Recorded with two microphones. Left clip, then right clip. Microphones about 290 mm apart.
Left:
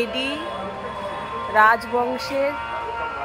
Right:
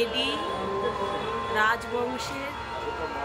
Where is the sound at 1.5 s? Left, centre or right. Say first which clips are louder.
Left 9 dB; centre.